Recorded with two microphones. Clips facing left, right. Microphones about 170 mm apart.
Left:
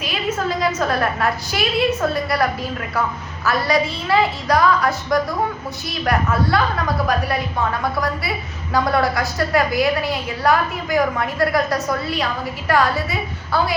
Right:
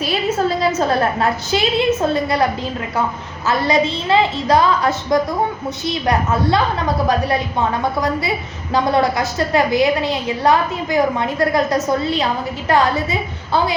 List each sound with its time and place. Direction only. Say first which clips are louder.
0.0 s a woman's voice: right 5 dB; 30° right (ahead or behind)